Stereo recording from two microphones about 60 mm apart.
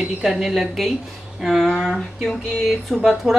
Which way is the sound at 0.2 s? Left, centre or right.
Centre.